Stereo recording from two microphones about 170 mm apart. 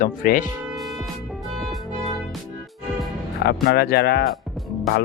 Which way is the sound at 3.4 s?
70° left (ahead or behind).